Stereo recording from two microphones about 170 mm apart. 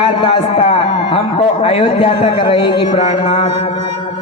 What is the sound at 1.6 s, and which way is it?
A man's voice, 35° left (ahead or behind).